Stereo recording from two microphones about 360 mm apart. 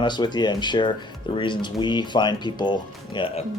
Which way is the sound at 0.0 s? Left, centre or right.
Centre.